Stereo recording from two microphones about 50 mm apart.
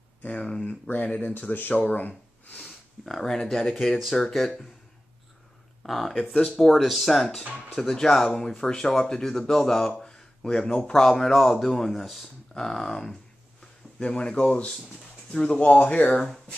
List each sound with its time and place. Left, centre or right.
0.2 s speech: left
1.5 s speech: left
1.8 s gasp: left
3.1 s speech: centre
5.9 s speech: centre
12.5 s speech: centre
16.1 s speech: centre